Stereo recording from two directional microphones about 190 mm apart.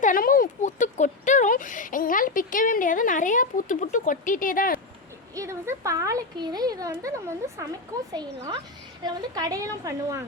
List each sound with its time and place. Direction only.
0.0 s speech: 45° left (ahead or behind)
5.3 s speech: 15° right (ahead or behind)